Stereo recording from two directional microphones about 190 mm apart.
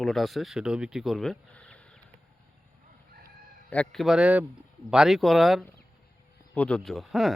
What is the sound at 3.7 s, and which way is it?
A man's voice, 5° left (ahead or behind).